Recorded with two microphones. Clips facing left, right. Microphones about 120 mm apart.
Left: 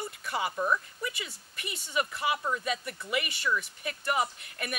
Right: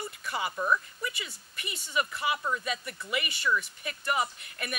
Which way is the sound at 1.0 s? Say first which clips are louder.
Even; 50° left (ahead or behind).